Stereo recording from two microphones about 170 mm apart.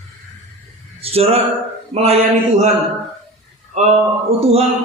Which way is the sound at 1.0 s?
35° right (ahead or behind).